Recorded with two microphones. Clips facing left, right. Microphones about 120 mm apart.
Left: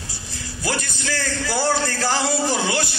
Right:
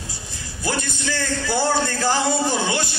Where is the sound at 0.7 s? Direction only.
20° right (ahead or behind).